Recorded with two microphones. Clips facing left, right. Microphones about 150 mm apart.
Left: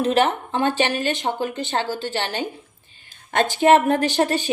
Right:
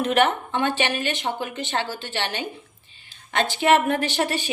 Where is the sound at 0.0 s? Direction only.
30° left (ahead or behind).